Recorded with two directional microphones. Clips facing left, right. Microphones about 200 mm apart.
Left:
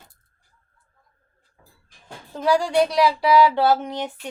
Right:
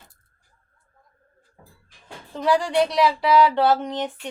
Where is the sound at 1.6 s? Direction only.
45° right (ahead or behind).